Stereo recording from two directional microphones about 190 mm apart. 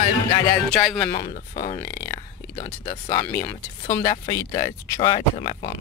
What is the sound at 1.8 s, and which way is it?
Speech, 15° left (ahead or behind).